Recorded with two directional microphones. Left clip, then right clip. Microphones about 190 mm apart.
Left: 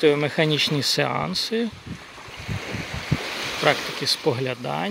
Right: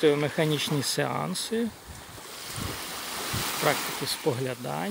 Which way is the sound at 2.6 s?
60° right (ahead or behind).